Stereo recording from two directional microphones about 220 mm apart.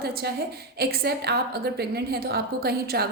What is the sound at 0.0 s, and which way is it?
A woman's voice, 45° right (ahead or behind).